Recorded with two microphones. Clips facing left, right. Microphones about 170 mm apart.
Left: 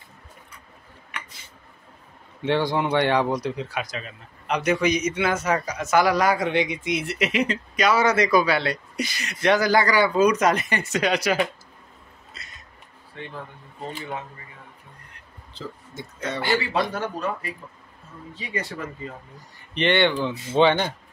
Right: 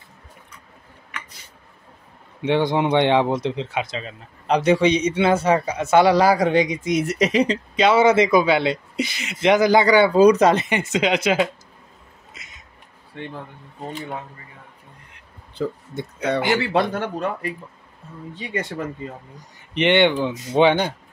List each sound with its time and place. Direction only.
2.4 s speech: 20° right (ahead or behind)
15.5 s speech: 60° right (ahead or behind)
19.7 s speech: 20° right (ahead or behind)